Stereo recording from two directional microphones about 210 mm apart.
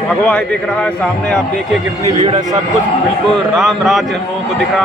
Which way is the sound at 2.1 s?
35° right (ahead or behind).